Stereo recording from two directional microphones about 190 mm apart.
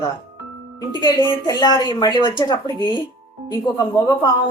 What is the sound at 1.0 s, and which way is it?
A woman's voice, 20° left (ahead or behind).